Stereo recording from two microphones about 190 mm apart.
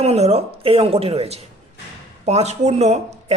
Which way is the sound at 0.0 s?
35° right (ahead or behind).